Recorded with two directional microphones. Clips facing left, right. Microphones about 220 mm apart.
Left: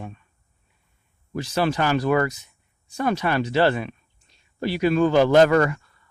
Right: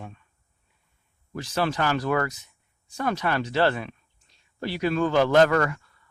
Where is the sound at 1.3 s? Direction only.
10° left (ahead or behind).